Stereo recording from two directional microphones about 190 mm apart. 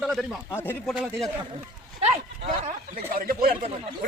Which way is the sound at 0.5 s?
10° left (ahead or behind).